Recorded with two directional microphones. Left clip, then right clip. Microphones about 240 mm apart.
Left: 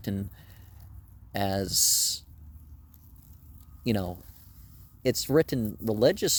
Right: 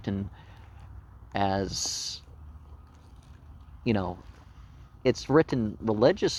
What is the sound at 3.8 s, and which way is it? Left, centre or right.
Speech, left.